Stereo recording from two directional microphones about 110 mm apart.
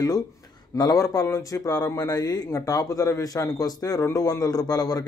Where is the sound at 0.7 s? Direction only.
35° left (ahead or behind).